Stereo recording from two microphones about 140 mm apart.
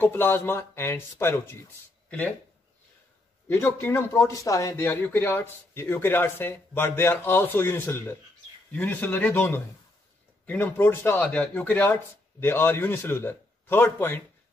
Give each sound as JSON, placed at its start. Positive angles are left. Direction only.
{"t": 0.0, "sound": "speech", "side_deg": 15}
{"t": 3.4, "sound": "speech", "side_deg": 20}